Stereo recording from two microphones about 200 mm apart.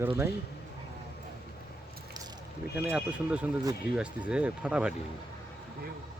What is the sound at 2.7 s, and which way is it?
Speech, 5° right (ahead or behind).